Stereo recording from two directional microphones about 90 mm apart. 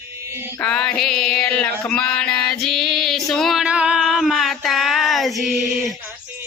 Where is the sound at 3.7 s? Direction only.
15° right (ahead or behind).